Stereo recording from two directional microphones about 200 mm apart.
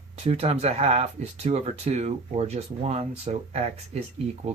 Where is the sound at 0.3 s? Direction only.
30° right (ahead or behind).